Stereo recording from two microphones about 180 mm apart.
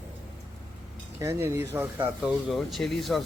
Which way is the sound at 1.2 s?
15° right (ahead or behind).